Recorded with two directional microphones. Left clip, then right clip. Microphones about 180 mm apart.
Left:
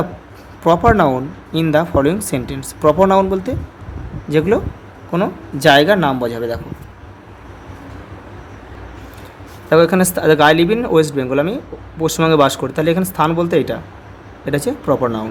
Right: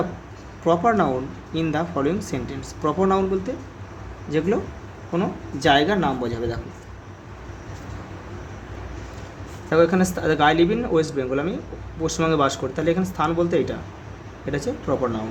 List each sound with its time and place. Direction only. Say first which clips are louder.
0.6 s speech: left 7 dB; 50° left (ahead or behind)
9.6 s speech: left 6 dB; 45° left (ahead or behind)